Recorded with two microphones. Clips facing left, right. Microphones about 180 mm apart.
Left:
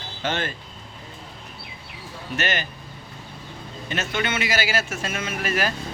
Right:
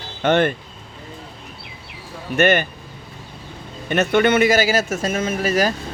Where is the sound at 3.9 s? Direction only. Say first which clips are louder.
Right 11 dB; 60° right (ahead or behind); by 5.7 s 40° right (ahead or behind).